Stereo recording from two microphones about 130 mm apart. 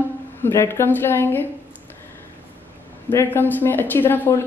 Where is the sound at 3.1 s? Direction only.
15° left (ahead or behind).